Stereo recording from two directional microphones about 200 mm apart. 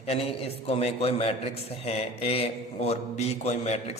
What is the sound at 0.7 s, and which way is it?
Speech, 30° left (ahead or behind).